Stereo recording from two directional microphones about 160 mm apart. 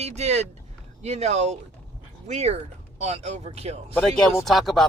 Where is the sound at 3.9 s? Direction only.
5° left (ahead or behind).